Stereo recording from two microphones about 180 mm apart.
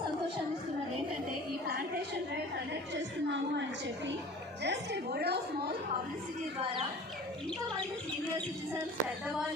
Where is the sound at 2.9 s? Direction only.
80° right; by 5.7 s 65° right (ahead or behind).